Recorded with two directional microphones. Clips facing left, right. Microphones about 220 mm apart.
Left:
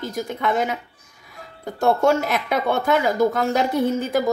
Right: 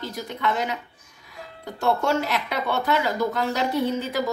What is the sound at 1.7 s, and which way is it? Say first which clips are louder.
Speech: left 5 dB; 50° left (ahead or behind).